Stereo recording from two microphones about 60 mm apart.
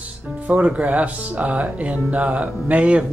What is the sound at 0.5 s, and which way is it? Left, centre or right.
Speech, right.